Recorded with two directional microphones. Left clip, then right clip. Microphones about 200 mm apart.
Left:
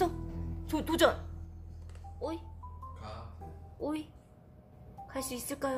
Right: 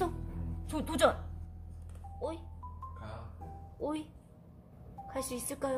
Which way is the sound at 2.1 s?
5° left (ahead or behind).